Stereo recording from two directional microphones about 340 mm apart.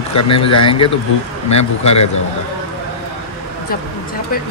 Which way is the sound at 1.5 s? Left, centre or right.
Left.